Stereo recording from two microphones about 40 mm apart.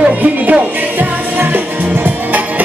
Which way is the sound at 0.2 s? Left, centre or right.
Right.